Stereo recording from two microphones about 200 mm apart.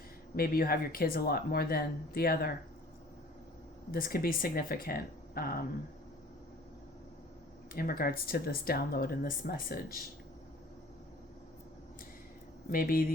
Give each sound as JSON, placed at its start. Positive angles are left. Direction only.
{"t": 0.3, "sound": "speech", "side_deg": 45}
{"t": 3.9, "sound": "speech", "side_deg": 45}
{"t": 7.7, "sound": "speech", "side_deg": 45}
{"t": 12.7, "sound": "speech", "side_deg": 45}